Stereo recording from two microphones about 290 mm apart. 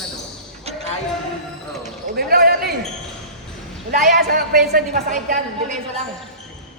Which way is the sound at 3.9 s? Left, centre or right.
Right.